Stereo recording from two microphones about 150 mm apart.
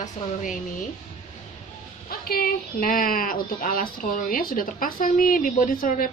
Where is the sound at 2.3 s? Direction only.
75° left (ahead or behind).